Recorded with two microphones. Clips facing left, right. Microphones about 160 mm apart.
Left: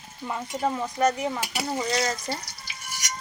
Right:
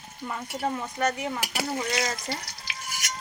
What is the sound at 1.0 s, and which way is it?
Speech, 35° left (ahead or behind).